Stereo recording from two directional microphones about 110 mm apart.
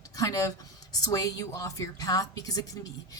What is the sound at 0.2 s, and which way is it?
A woman's voice, 30° left (ahead or behind).